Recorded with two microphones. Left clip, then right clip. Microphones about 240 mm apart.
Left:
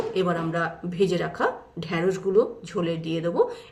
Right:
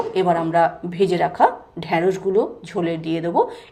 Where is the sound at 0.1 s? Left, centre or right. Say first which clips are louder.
Right 7 dB; centre.